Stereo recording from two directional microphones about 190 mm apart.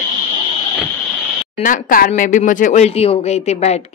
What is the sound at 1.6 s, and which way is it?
Speech, 45° left (ahead or behind).